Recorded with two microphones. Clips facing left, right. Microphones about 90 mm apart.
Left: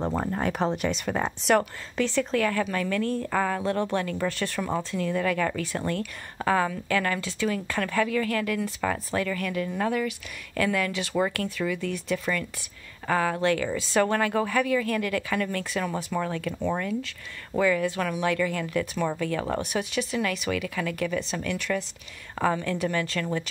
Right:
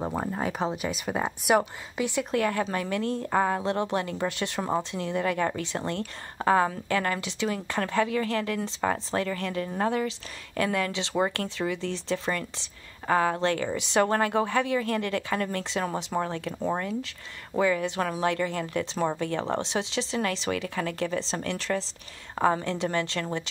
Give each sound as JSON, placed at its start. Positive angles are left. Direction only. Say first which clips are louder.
{"t": 0.2, "sound": "speech", "louder": "left 2 dB", "side_deg": 0}
{"t": 14.0, "sound": "speech", "louder": "even", "side_deg": -30}